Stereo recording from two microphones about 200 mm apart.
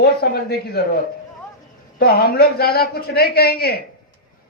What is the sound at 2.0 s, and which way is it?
A man's voice, 50° left (ahead or behind).